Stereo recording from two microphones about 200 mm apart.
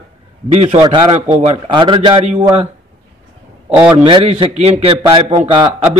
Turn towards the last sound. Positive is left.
turn(degrees=-20)  # may be behind; listen again after turning